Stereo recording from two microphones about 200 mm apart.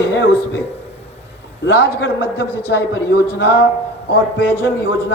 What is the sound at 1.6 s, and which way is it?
A man's voice, 55° left (ahead or behind).